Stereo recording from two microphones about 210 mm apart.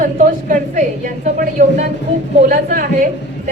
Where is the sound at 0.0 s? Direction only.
40° right (ahead or behind).